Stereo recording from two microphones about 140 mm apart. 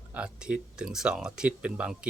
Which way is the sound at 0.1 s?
5° right (ahead or behind).